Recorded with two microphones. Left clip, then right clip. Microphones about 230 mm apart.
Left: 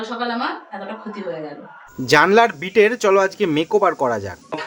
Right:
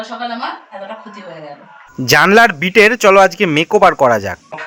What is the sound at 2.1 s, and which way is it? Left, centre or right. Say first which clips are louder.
Speech: right 5 dB; centre.